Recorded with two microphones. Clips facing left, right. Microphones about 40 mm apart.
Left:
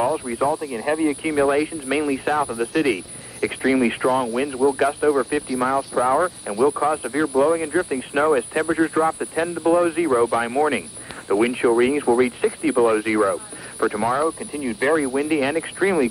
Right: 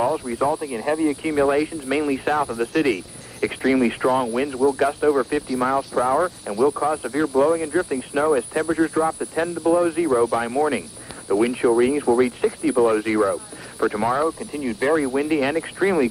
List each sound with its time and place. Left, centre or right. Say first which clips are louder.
0.0 s speech: even; centre
0.6 s speech: even; centre
0.8 s speech: even; left
4.6 s speech: left 1 dB; centre
6.0 s speech: left 1 dB; centre
8.1 s speech: left 1 dB; left
13.7 s speech: even; centre